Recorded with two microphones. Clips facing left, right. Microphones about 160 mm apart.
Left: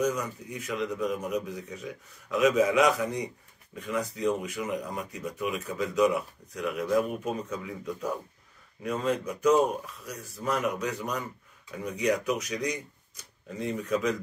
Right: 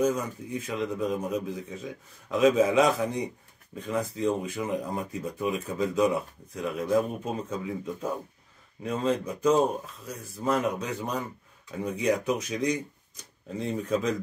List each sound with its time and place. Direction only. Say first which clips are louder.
0.0 s speech: right 2 dB; 25° right (ahead or behind)
13.8 s speech: even; 25° right (ahead or behind)